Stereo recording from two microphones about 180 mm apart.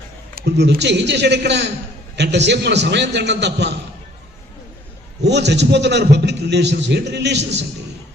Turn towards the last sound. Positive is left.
turn(degrees=-70)  # may be behind; listen again after turning